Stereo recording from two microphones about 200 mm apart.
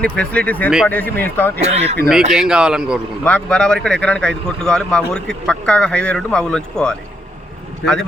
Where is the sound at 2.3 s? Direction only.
5° right (ahead or behind).